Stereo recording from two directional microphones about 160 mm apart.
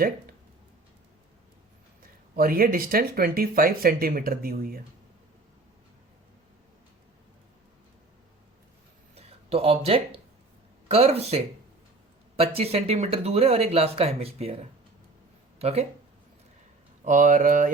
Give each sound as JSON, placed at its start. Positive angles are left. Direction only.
{"t": 2.3, "sound": "speech", "side_deg": -65}
{"t": 9.1, "sound": "speech", "side_deg": -35}
{"t": 17.0, "sound": "speech", "side_deg": -50}